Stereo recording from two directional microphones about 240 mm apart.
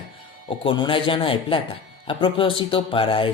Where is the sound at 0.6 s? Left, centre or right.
Left.